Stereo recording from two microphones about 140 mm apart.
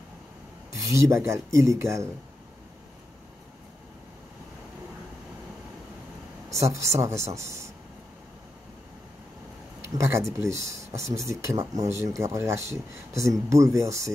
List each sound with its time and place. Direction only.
0.7 s speech: 20° right (ahead or behind)
6.5 s speech: 20° right (ahead or behind)
9.9 s speech: 20° right (ahead or behind)